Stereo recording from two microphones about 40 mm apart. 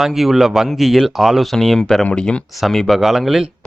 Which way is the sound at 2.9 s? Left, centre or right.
Centre.